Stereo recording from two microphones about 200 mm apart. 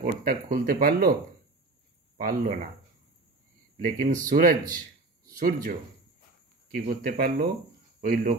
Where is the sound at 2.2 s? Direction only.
45° right (ahead or behind).